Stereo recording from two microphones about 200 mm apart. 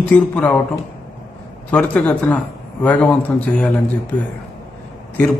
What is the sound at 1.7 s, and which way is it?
A man's voice, 5° left (ahead or behind).